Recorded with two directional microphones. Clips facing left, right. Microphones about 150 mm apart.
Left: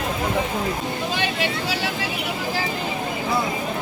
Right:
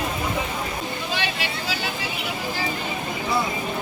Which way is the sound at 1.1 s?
45° left (ahead or behind).